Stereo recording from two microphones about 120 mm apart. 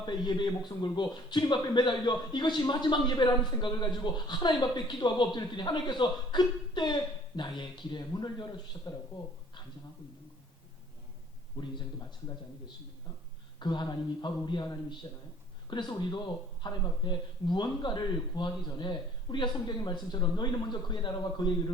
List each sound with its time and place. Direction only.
0.0 s a man's voice: 35° left (ahead or behind)
11.5 s a man's voice: 35° left (ahead or behind)
13.6 s a man's voice: 40° left (ahead or behind)